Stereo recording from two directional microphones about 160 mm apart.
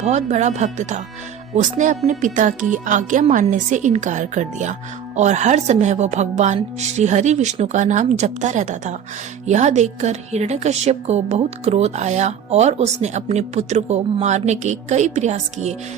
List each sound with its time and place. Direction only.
0.0 s a woman's voice: 45° right (ahead or behind)